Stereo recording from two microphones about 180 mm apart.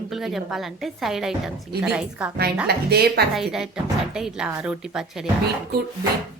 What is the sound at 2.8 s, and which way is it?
Speech, 65° right (ahead or behind).